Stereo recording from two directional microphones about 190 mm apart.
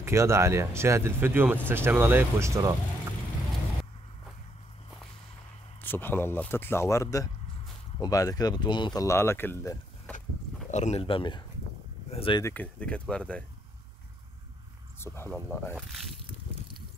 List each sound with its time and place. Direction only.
0.0 s speech: 15° right (ahead or behind)
5.8 s speech: 10° left (ahead or behind)
10.7 s speech: 35° left (ahead or behind)
12.4 s speech: 5° left (ahead or behind)
15.0 s speech: 10° left (ahead or behind)
15.9 s a sound: centre (ahead or behind)